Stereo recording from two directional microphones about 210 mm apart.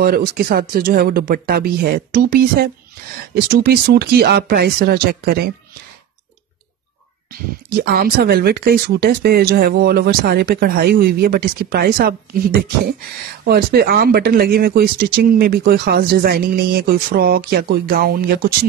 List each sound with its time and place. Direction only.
0.0 s speech: 45° right (ahead or behind)
7.8 s speech: 45° right (ahead or behind)